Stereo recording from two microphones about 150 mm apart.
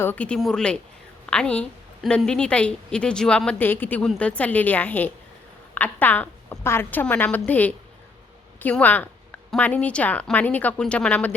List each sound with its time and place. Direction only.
0.0 s a woman's voice: 10° left (ahead or behind)